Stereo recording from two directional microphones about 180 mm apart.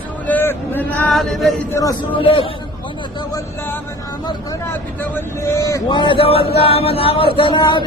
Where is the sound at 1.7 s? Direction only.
20° left (ahead or behind).